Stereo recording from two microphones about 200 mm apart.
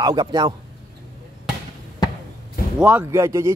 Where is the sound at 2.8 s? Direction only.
10° right (ahead or behind).